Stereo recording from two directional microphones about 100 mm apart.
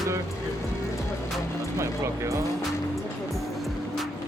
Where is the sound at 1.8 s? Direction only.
30° right (ahead or behind).